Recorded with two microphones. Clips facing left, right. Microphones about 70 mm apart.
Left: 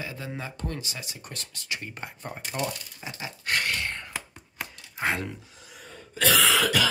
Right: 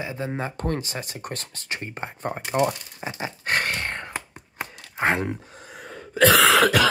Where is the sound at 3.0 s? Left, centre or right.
Right.